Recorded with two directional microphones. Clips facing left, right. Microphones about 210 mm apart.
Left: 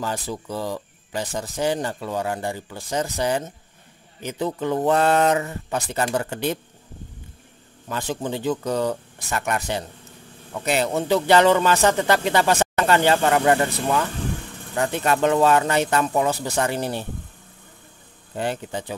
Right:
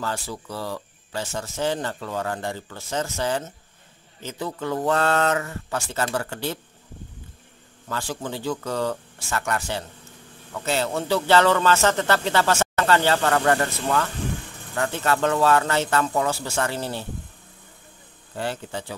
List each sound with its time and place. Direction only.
0.0 s speech: 15° left (ahead or behind)
7.9 s speech: 20° left (ahead or behind)
18.3 s speech: 15° left (ahead or behind)